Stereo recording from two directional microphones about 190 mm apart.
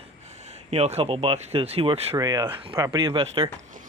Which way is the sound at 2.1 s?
20° right (ahead or behind).